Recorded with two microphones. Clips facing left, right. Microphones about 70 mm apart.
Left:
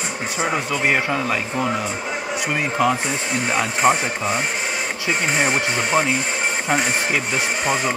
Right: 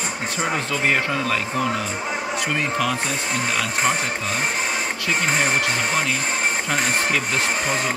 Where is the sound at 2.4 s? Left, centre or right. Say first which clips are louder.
Left 4 dB; centre.